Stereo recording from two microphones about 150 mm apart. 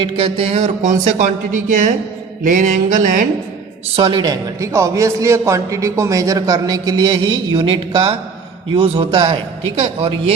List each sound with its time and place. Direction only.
0.0 s speech: 35° right (ahead or behind); by 1.9 s 55° right (ahead or behind)
2.4 s mantra: 60° right (ahead or behind)
3.9 s a man's voice: 35° right (ahead or behind)